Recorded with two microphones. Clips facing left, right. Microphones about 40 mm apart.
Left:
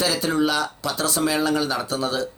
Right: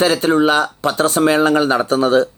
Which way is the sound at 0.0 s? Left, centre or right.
Right.